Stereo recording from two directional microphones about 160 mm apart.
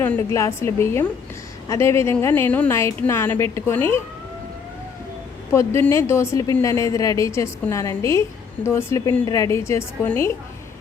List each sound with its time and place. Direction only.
0.0 s a woman's voice: 15° left (ahead or behind)
5.5 s a woman's voice: 15° left (ahead or behind)